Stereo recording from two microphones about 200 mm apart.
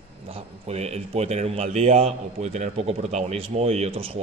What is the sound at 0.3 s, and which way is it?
A man's voice, 30° right (ahead or behind).